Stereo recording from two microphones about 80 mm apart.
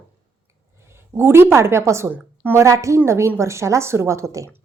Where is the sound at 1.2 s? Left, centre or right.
Right.